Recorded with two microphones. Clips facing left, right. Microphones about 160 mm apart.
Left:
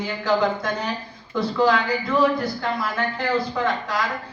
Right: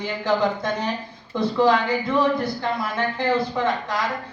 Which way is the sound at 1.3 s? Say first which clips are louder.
Right 1 dB; 25° right (ahead or behind).